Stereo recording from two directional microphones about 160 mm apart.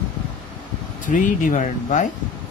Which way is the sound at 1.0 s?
55° left (ahead or behind).